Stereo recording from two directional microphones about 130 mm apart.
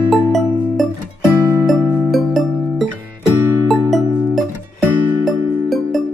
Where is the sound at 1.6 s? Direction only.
Centre (ahead or behind).